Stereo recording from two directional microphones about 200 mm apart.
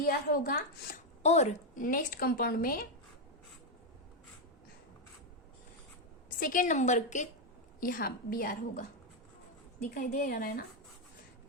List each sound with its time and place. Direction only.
0.0 s a woman's voice: 45° left (ahead or behind)
1.2 s a woman's voice: 35° left (ahead or behind)
6.4 s a woman's voice: 40° left (ahead or behind)
9.9 s a woman's voice: 45° left (ahead or behind)